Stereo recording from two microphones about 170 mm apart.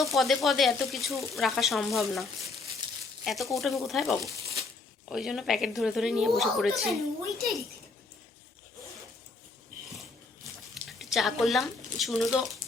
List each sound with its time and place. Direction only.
0.0 s speech: centre (ahead or behind)
3.2 s speech: centre (ahead or behind)
4.2 s a sound: 20° right (ahead or behind)
5.0 s speech: centre (ahead or behind)
10.8 s speech: centre (ahead or behind)